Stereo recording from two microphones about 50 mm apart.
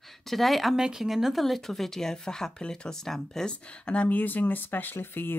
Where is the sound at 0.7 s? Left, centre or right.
Centre.